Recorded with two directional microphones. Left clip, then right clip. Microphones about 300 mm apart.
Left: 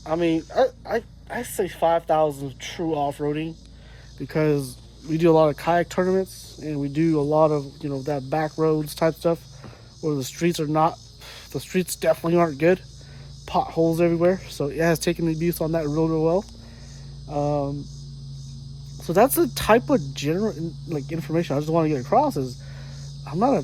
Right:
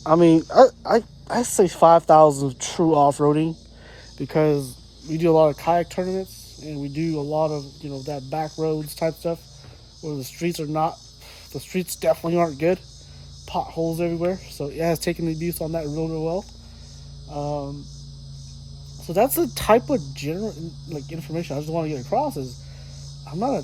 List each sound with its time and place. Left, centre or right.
0.0 s speech: right
1.6 s speech: right
3.0 s speech: right
4.2 s speech: centre
19.0 s speech: centre